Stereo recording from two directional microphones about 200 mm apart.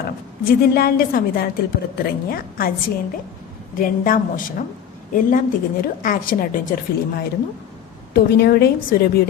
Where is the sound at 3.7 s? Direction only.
45° left (ahead or behind).